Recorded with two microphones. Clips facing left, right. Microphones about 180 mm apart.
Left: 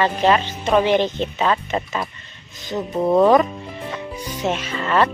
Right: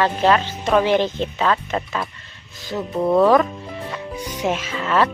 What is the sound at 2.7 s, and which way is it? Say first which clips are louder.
Speech: left 1 dB; 20° left (ahead or behind).